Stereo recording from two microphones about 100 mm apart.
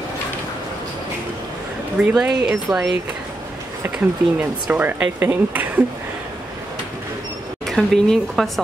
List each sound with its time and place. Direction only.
2.0 s speech: 10° right (ahead or behind)
4.4 s speech: 15° right (ahead or behind)
7.6 s speech: centre (ahead or behind)